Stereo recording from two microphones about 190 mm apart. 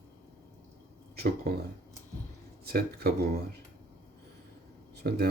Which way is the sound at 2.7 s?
55° right (ahead or behind).